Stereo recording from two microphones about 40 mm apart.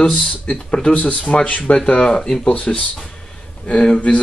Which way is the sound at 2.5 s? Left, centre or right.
Left.